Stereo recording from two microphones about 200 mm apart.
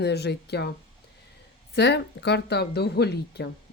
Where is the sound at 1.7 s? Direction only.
55° left (ahead or behind).